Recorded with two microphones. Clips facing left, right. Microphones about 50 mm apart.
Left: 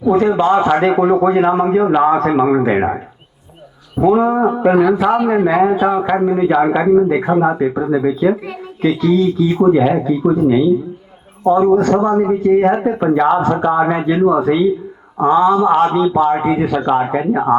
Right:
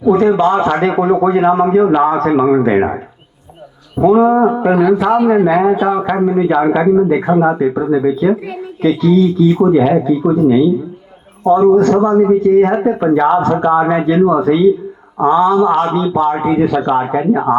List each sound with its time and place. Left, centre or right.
0.0 s a man's voice: centre
3.9 s speech: centre
4.7 s speech: left
4.9 s a man's voice: centre
11.4 s a man's voice: centre